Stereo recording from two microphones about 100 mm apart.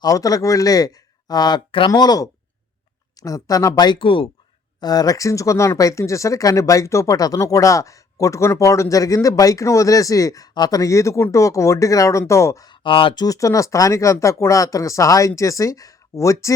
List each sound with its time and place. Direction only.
0.0 s speech: 35° left (ahead or behind)
3.9 s speech: 60° left (ahead or behind)
4.8 s speech: 40° left (ahead or behind)
12.6 s speech: 55° left (ahead or behind)
13.1 s speech: 35° left (ahead or behind)